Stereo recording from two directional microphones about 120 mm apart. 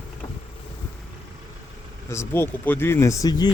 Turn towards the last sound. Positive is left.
turn(degrees=35)  # may be behind; listen again after turning